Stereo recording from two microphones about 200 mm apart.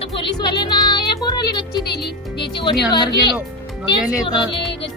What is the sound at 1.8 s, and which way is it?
Music, 55° left (ahead or behind).